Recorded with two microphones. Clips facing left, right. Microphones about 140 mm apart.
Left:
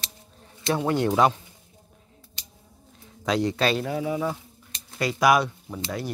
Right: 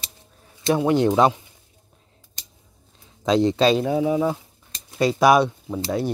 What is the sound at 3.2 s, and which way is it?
Speech, 25° right (ahead or behind).